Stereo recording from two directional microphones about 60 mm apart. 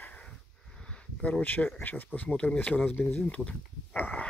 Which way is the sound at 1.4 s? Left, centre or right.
Left.